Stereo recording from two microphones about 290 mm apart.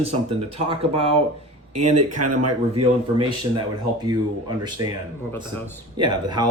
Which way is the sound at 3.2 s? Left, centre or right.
Centre.